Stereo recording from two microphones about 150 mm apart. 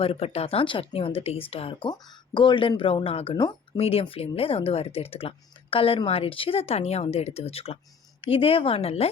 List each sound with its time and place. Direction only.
0.0 s speech: 40° left (ahead or behind)